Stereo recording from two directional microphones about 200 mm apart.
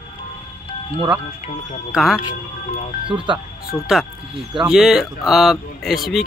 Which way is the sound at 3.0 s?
25° right (ahead or behind).